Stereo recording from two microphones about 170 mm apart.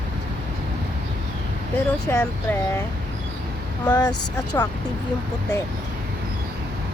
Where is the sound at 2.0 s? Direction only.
15° left (ahead or behind).